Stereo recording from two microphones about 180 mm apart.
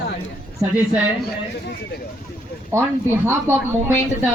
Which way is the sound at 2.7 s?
15° right (ahead or behind).